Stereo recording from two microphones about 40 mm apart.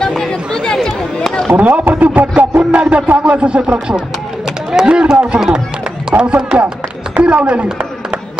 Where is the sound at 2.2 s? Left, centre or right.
Right.